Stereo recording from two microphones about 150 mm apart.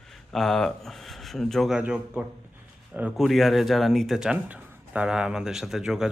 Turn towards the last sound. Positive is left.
turn(degrees=-5)  # may be behind; listen again after turning